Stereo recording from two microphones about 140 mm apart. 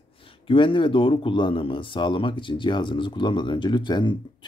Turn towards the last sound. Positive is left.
turn(degrees=35)  # may be behind; listen again after turning